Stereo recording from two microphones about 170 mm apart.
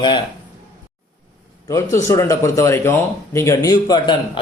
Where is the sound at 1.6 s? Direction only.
20° left (ahead or behind).